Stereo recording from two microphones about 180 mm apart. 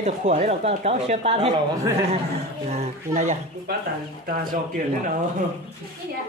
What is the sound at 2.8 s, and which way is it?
Speech, 40° right (ahead or behind).